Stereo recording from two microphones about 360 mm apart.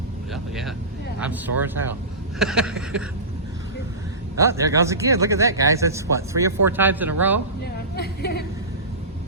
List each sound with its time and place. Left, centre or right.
1.2 s speech: centre
4.4 s speech: centre
7.6 s a sound: left